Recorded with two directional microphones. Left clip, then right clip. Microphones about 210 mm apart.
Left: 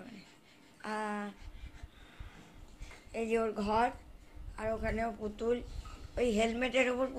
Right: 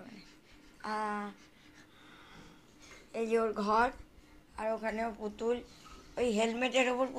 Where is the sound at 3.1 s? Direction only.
10° left (ahead or behind).